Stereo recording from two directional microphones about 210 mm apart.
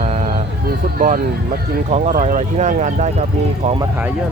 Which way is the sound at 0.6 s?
40° right (ahead or behind).